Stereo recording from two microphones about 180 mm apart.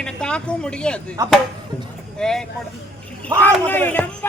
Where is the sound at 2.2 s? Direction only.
5° left (ahead or behind).